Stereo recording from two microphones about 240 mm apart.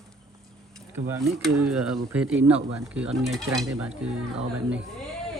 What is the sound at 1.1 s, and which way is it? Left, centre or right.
Speech, centre.